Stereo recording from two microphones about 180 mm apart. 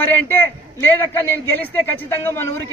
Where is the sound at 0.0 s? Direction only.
10° left (ahead or behind).